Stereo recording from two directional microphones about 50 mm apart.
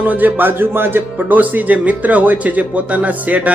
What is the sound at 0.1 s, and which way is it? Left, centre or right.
Speech, right.